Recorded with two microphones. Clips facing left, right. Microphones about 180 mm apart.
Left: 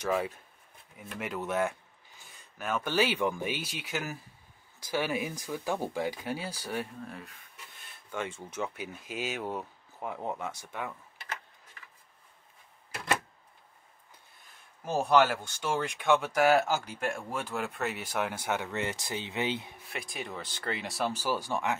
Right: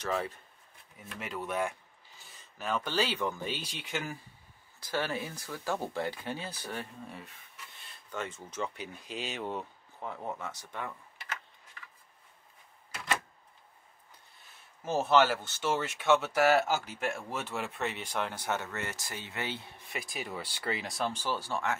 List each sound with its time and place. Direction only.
0.0 s speech: 10° left (ahead or behind)
1.4 s speech: 10° right (ahead or behind)
2.1 s speech: centre (ahead or behind)
7.1 s speech: centre (ahead or behind)
7.8 s speech: 10° left (ahead or behind)
14.8 s speech: 10° left (ahead or behind)
15.4 s speech: 5° right (ahead or behind); by 19.8 s 15° left (ahead or behind)
19.9 s speech: centre (ahead or behind); by 21.7 s 15° left (ahead or behind)